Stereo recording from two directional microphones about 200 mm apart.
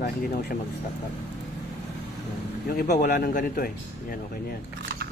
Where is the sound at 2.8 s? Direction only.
45° left (ahead or behind).